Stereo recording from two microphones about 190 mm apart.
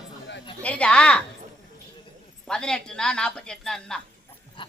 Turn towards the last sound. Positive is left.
turn(degrees=5)  # may be behind; listen again after turning